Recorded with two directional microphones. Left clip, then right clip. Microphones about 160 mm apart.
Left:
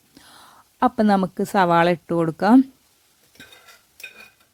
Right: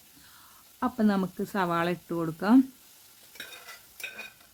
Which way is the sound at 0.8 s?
55° left (ahead or behind).